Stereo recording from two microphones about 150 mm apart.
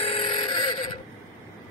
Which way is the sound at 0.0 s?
45° left (ahead or behind).